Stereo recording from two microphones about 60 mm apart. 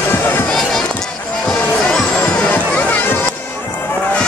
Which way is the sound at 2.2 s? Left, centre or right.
Left.